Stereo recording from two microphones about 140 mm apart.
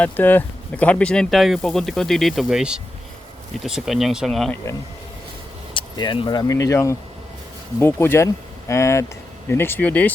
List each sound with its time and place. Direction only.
0.0 s speech: 10° left (ahead or behind)
5.7 s speech: 35° left (ahead or behind); by 10.1 s 10° left (ahead or behind)